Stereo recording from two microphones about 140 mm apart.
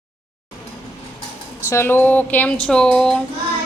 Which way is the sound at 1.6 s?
20° left (ahead or behind).